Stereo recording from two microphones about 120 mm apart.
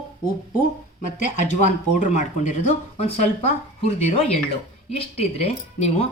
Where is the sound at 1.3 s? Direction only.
90° left; by 6.1 s 65° left (ahead or behind).